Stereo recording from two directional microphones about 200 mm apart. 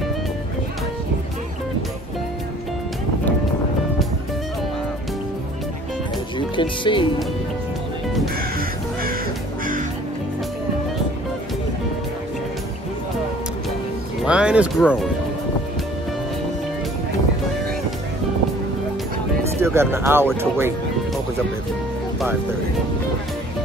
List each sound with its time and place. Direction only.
6.3 s speech: 25° left (ahead or behind)
8.4 s music: 50° right (ahead or behind)
14.2 s music: 5° right (ahead or behind)
14.8 s speech: 5° left (ahead or behind)
19.6 s speech: 10° right (ahead or behind)